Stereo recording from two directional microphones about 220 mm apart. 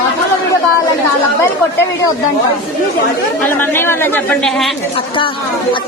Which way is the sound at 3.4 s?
10° left (ahead or behind).